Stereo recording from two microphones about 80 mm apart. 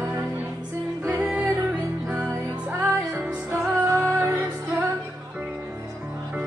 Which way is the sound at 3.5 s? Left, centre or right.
Right.